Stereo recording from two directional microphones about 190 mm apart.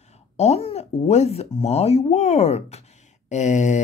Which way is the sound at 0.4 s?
35° left (ahead or behind).